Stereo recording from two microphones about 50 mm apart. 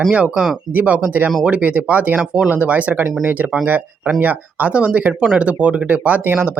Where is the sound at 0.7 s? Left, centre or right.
Right.